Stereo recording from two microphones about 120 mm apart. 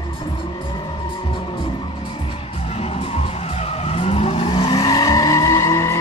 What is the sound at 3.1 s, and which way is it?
Vehicle, 60° left (ahead or behind).